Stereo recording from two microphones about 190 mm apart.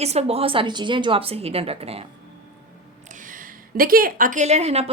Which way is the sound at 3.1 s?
45° right (ahead or behind).